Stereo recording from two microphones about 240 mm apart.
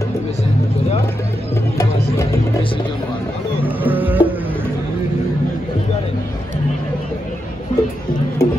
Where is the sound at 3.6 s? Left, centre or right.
Centre.